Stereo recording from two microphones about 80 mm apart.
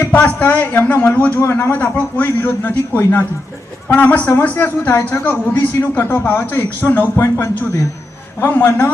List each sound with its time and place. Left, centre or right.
0.1 s a woman's voice: centre